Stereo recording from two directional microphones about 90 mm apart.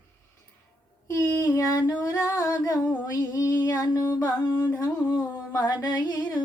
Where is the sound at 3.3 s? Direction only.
40° left (ahead or behind).